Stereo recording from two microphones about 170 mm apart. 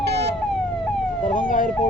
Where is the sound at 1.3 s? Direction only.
55° left (ahead or behind).